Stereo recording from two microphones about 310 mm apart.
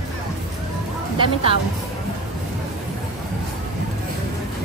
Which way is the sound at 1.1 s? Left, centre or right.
Centre.